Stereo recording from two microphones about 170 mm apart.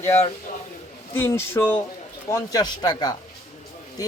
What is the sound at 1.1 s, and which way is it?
Speech, 15° left (ahead or behind).